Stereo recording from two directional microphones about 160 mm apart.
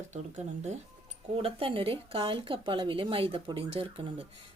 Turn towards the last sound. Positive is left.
turn(degrees=-35)  # may be behind; listen again after turning